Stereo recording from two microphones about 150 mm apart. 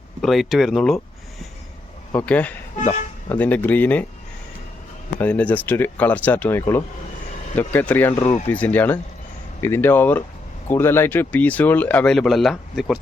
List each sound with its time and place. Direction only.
0.2 s speech: centre (ahead or behind)
2.1 s speech: 10° left (ahead or behind)
5.2 s speech: 10° left (ahead or behind)
8.2 s speech: 50° left (ahead or behind)
8.4 s speech: 10° left (ahead or behind)